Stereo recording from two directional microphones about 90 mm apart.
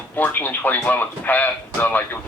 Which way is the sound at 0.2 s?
20° left (ahead or behind).